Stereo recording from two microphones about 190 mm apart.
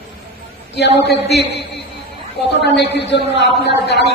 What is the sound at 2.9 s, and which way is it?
A man's voice, 65° left (ahead or behind).